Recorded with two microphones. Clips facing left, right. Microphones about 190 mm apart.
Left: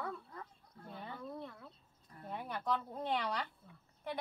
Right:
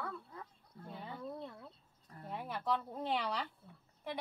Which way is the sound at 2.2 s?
5° right (ahead or behind).